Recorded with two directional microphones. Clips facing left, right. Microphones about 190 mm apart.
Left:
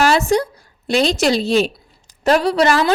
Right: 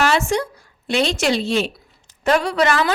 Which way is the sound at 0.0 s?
35° left (ahead or behind).